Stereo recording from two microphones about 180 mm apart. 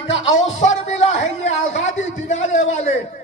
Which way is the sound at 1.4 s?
40° left (ahead or behind).